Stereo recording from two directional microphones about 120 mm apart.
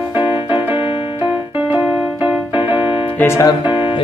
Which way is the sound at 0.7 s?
50° left (ahead or behind).